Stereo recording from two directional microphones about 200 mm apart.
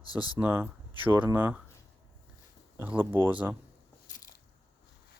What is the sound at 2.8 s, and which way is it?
Speech, 10° right (ahead or behind).